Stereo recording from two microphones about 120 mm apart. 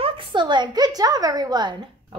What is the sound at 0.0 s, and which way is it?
A woman's voice, 50° right (ahead or behind).